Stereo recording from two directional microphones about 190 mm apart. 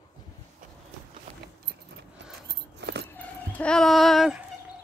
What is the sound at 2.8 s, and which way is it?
Keys jangling, 60° right (ahead or behind).